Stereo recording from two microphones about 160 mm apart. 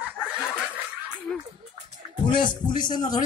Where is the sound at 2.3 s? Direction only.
30° left (ahead or behind).